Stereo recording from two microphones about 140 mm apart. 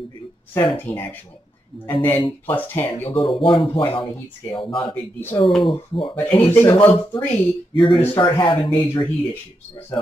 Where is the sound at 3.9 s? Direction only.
35° left (ahead or behind).